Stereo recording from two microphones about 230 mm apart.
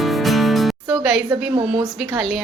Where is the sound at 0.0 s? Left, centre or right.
Centre.